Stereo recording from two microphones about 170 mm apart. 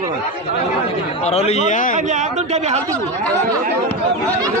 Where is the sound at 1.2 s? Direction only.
40° left (ahead or behind).